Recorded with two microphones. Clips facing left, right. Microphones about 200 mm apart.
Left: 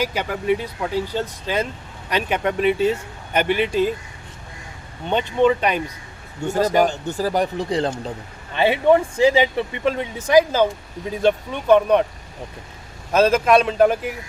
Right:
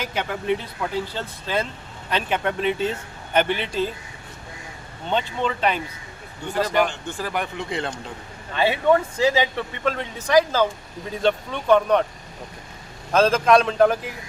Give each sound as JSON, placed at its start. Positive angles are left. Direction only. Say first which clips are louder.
{"t": 0.0, "sound": "speech", "louder": "left 4 dB", "side_deg": 10}
{"t": 5.0, "sound": "speech", "louder": "left 7 dB", "side_deg": 15}
{"t": 6.4, "sound": "a man's voice", "louder": "left 4 dB", "side_deg": 45}
{"t": 8.5, "sound": "speech", "louder": "left 3 dB", "side_deg": 15}
{"t": 13.1, "sound": "speech", "louder": "left 1 dB", "side_deg": 5}